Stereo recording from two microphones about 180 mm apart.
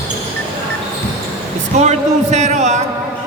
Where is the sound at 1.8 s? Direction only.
40° right (ahead or behind).